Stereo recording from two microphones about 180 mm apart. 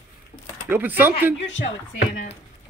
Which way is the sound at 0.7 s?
10° right (ahead or behind).